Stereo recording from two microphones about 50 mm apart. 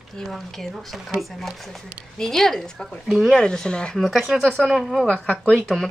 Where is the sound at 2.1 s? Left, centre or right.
Centre.